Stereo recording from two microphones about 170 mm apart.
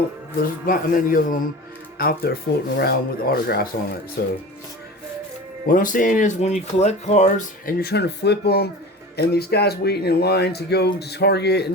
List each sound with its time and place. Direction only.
0.7 s speech: 55° left (ahead or behind)
2.0 s speech: 65° left (ahead or behind)
5.6 s speech: 50° left (ahead or behind); by 11.6 s 75° left (ahead or behind)